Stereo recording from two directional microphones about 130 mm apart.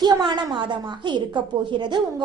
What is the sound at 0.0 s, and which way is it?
A woman's voice, 35° right (ahead or behind).